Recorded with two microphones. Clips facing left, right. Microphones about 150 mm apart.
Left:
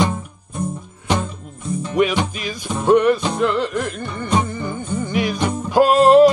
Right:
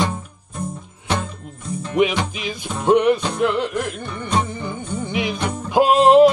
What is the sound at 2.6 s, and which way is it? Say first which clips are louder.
Music: left 1 dB; 15° right (ahead or behind).